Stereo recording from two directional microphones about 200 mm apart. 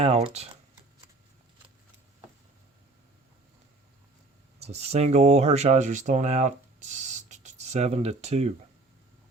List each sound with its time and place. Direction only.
0.0 s speech: 30° right (ahead or behind)
4.6 s speech: 30° right (ahead or behind)